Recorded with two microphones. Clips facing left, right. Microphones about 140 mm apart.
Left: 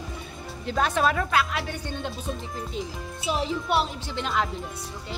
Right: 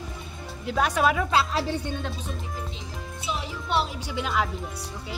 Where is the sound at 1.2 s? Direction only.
30° right (ahead or behind).